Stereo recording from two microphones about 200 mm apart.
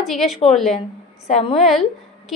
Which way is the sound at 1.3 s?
30° left (ahead or behind).